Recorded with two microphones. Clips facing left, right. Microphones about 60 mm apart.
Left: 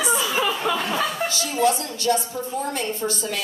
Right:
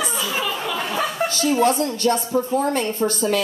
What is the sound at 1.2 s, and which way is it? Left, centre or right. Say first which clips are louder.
A woman's voice: right 5 dB; right.